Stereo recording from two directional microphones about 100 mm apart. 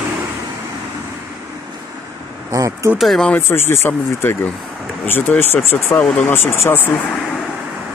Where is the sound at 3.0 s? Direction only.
Centre (ahead or behind).